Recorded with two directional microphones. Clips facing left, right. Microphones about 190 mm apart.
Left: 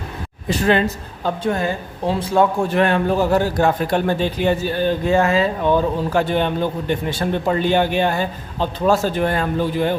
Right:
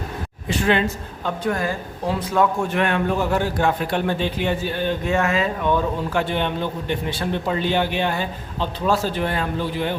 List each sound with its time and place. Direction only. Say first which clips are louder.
0.4 s a man's voice: left 3 dB; 40° left (ahead or behind)
1.5 s a man's voice: left 1 dB; 25° left (ahead or behind); by 10.0 s 45° left (ahead or behind)